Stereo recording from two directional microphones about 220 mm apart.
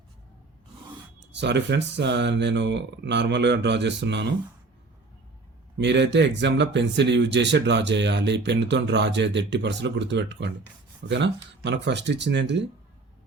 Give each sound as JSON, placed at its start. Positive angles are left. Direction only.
{"t": 1.3, "sound": "speech", "side_deg": -50}
{"t": 5.7, "sound": "speech", "side_deg": -50}